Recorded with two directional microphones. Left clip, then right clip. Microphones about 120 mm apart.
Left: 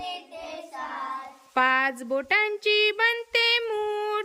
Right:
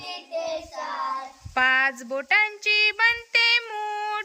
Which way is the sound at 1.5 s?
20° left (ahead or behind).